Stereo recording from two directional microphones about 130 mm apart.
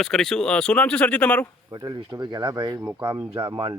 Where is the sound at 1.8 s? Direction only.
30° right (ahead or behind).